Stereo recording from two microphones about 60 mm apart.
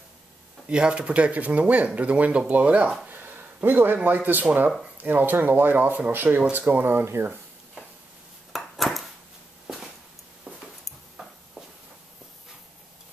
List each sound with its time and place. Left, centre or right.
0.7 s speech: centre
3.1 s speech: right
8.5 s a sound: centre